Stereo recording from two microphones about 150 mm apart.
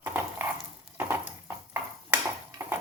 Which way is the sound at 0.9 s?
15° right (ahead or behind).